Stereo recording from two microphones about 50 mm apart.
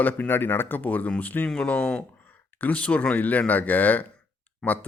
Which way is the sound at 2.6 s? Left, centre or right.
Left.